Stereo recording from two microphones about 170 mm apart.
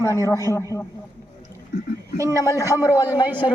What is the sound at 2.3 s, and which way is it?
Speech, 20° left (ahead or behind).